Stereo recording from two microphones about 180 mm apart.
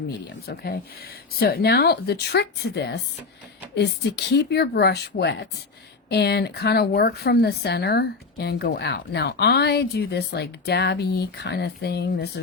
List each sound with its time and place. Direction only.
0.3 s speech: 60° left (ahead or behind)